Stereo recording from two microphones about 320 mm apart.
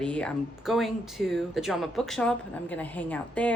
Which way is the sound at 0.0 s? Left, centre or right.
Centre.